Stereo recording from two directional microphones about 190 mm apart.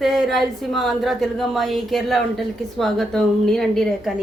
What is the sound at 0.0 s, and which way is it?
A woman's voice, centre (ahead or behind).